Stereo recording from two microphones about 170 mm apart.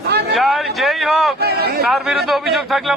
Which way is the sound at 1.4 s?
70° right (ahead or behind).